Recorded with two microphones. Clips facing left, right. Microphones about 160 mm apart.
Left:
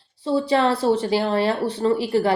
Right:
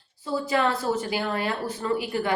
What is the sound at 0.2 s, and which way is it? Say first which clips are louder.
A woman's voice: left 5 dB; 30° left (ahead or behind).